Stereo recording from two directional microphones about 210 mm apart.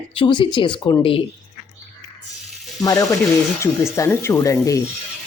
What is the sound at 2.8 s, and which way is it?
Speech, 15° left (ahead or behind).